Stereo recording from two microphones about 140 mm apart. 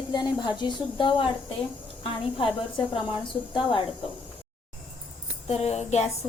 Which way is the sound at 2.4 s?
35° left (ahead or behind).